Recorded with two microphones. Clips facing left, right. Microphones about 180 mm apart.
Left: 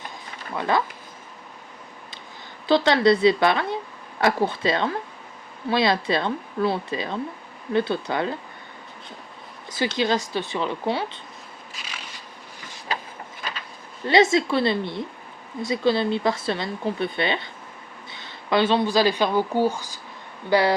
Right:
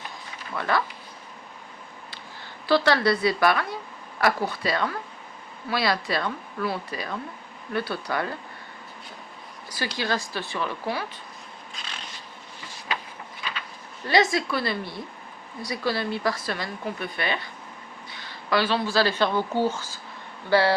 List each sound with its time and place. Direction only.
0.5 s speech: 20° left (ahead or behind)
2.6 s speech: 20° left (ahead or behind)
9.6 s speech: 20° left (ahead or behind)
13.4 s a sound: 45° left (ahead or behind)
14.1 s speech: 25° left (ahead or behind)